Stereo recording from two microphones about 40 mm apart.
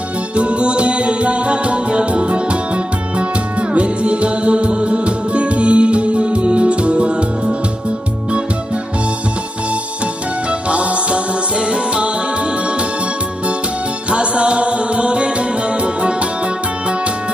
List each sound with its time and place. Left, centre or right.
0.3 s music: right
10.5 s music: right
14.1 s music: right